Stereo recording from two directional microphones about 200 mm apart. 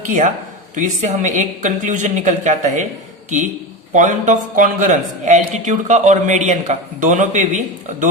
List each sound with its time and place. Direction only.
0.0 s a man's voice: 40° right (ahead or behind)
3.9 s a man's voice: 40° right (ahead or behind)